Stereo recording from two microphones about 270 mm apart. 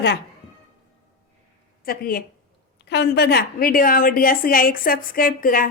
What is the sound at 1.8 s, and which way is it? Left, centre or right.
A woman's voice, left.